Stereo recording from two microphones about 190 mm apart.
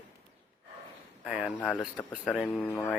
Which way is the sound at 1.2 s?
5° right (ahead or behind).